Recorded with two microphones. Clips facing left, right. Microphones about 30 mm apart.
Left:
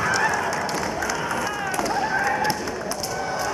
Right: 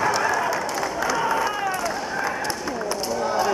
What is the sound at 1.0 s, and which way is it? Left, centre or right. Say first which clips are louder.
Crowd: right 3 dB; centre.